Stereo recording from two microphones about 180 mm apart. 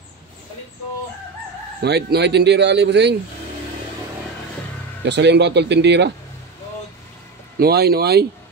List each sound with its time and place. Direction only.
1.8 s speech: 65° right (ahead or behind)
5.0 s speech: 70° right (ahead or behind)
7.5 s speech: 60° right (ahead or behind)